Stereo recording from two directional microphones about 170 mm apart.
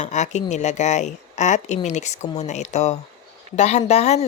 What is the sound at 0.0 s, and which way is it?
A woman's voice, 45° left (ahead or behind).